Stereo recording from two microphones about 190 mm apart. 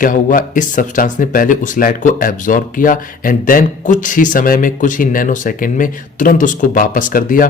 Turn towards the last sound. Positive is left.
turn(degrees=45)  # may be behind; listen again after turning